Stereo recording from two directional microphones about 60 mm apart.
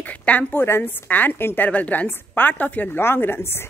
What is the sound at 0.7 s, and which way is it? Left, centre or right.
A woman's voice, left.